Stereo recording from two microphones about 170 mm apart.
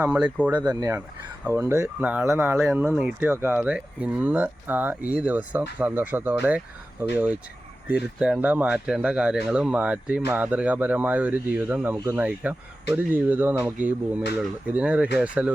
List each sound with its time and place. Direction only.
0.0 s speech: 10° right (ahead or behind)
0.6 s speech: 20° right (ahead or behind)
7.9 s speech: 5° right (ahead or behind)